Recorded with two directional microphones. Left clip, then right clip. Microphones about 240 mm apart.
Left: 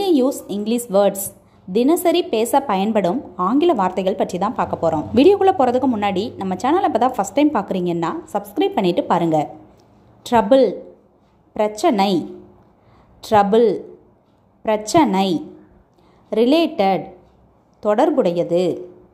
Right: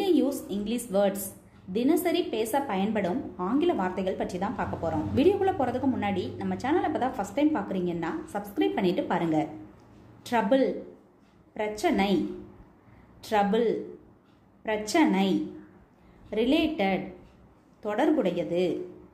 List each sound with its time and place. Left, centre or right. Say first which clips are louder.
0.0 s a sound: left 8 dB; left
1.7 s a woman's voice: left 10 dB; left
13.2 s a woman's voice: left 11 dB; left